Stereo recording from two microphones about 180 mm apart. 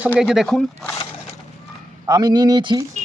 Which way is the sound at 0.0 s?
5° right (ahead or behind).